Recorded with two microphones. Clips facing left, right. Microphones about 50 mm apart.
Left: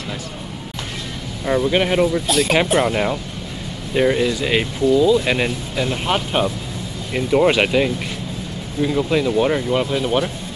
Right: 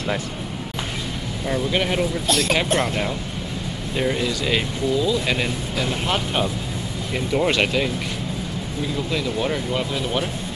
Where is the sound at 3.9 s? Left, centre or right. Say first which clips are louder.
Left 6 dB; centre.